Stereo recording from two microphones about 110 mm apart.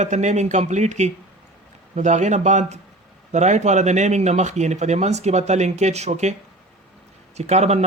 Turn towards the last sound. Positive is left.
turn(degrees=-85)